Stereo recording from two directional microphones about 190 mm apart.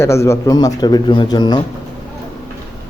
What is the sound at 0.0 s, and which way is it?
Speech, 15° left (ahead or behind).